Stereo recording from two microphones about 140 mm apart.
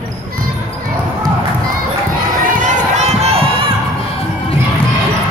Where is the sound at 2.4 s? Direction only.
60° right (ahead or behind); by 3.7 s 45° right (ahead or behind).